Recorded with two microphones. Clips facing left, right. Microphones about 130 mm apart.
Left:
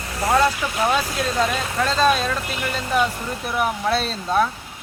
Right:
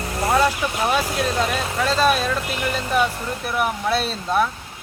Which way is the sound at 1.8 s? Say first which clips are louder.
Even; 10° right (ahead or behind).